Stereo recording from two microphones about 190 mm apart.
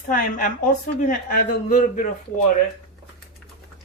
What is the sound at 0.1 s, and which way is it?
A woman's voice, 45° left (ahead or behind).